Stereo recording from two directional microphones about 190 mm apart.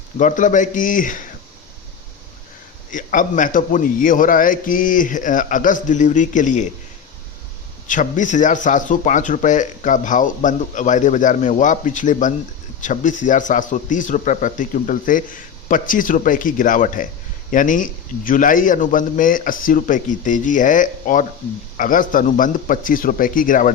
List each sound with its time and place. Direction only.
0.2 s a man's voice: 40° left (ahead or behind)
2.9 s a man's voice: 45° left (ahead or behind)
7.9 s a man's voice: 40° left (ahead or behind)